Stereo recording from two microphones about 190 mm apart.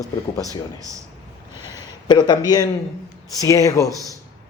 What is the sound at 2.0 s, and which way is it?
A man's voice, 20° left (ahead or behind).